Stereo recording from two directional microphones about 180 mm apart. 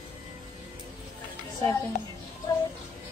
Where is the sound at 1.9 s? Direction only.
40° left (ahead or behind).